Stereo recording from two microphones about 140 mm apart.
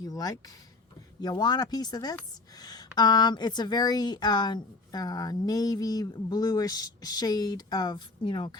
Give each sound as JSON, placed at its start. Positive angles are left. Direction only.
{"t": 0.0, "sound": "a woman's voice", "side_deg": 25}